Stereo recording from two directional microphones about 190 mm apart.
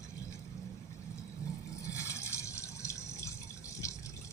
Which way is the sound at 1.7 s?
15° left (ahead or behind).